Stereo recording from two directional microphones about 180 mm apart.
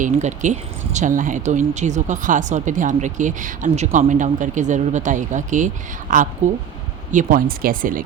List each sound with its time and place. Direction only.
0.0 s speech: 40° right (ahead or behind)